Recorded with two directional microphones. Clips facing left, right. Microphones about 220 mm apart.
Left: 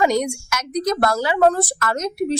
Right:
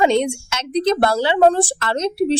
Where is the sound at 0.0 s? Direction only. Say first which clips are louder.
Right 3 dB; 25° right (ahead or behind).